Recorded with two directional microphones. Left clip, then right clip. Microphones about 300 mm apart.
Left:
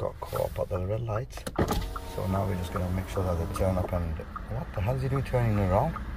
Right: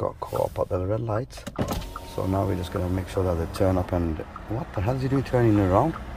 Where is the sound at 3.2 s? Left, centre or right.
Right.